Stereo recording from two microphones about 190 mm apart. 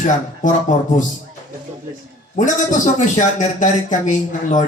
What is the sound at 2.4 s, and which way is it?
A man's voice, 40° left (ahead or behind).